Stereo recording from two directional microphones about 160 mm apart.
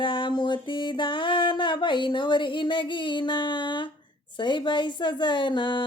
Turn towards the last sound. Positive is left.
turn(degrees=30)  # may be behind; listen again after turning